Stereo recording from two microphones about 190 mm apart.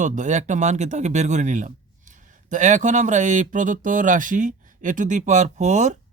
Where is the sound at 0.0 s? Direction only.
40° right (ahead or behind).